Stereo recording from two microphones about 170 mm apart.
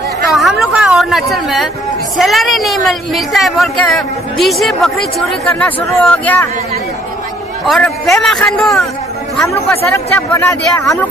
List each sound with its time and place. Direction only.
0.3 s a sound: centre (ahead or behind)
2.1 s a woman's voice: centre (ahead or behind)
7.6 s a woman's voice: centre (ahead or behind)
9.9 s speech: 15° left (ahead or behind)